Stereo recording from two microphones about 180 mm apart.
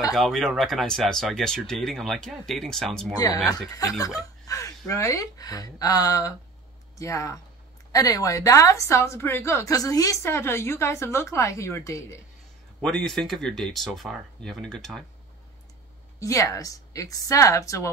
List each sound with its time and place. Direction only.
0.1 s speech: centre (ahead or behind)
3.4 s a woman's voice: 20° left (ahead or behind)
12.8 s speech: 5° left (ahead or behind)
16.2 s a woman's voice: 20° left (ahead or behind)